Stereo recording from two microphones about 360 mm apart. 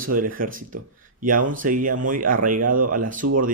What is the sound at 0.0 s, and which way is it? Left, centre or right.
Speech, right.